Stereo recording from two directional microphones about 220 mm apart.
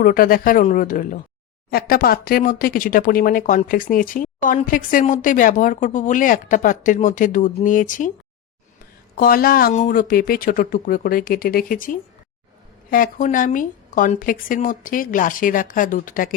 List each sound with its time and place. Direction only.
0.0 s speech: 40° left (ahead or behind)
9.1 s speech: 40° left (ahead or behind)